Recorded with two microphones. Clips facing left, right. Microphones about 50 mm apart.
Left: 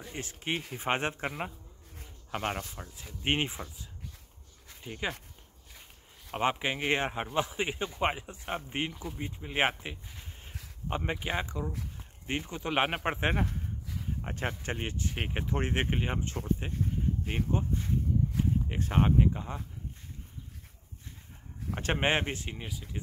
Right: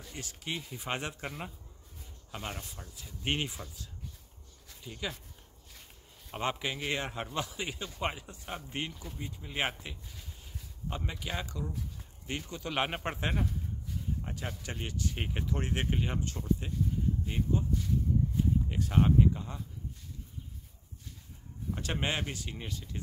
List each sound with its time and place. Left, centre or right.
0.0 s speech: left
4.6 s a sound: left
6.5 s speech: left
17.2 s a sound: left
17.5 s speech: left
21.7 s speech: left
22.6 s speech: centre